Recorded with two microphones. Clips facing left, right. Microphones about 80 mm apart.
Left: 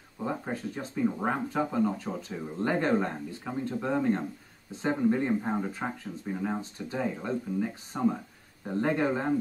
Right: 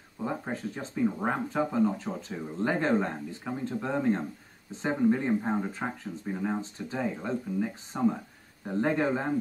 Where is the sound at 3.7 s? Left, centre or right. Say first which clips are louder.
Even; centre.